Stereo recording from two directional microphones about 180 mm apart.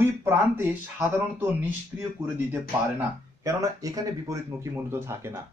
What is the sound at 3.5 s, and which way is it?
Speech, 20° right (ahead or behind).